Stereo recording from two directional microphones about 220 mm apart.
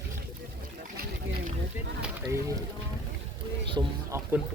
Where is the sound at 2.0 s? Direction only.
15° right (ahead or behind).